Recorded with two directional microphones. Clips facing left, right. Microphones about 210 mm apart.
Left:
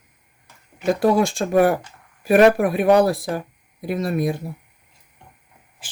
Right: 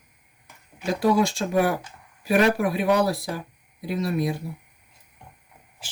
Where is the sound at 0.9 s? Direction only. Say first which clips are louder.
Left 3 dB; 50° left (ahead or behind).